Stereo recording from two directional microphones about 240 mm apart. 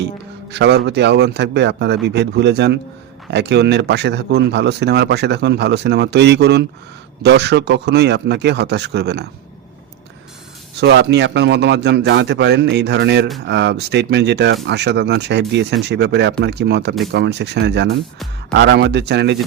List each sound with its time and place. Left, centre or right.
0.5 s speech: right
10.8 s speech: right